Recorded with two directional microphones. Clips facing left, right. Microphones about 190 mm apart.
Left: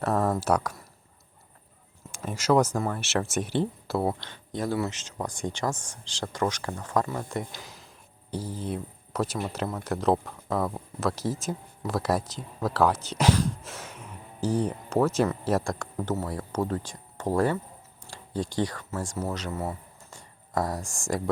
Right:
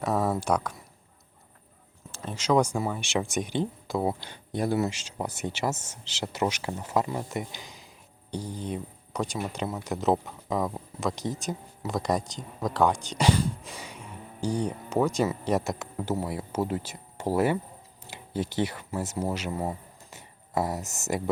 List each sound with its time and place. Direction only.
0.0 s a sound: 10° right (ahead or behind)
0.3 s speech: 5° left (ahead or behind)
2.1 s speech: 10° left (ahead or behind)
2.6 s speech: 5° right (ahead or behind)
4.1 s speech: 15° right (ahead or behind)
18.1 s speech: 25° right (ahead or behind)
19.0 s speech: 10° right (ahead or behind)
20.5 s speech: 5° right (ahead or behind)